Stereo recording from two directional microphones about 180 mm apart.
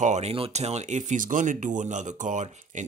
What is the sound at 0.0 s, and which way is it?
Speech, 40° right (ahead or behind).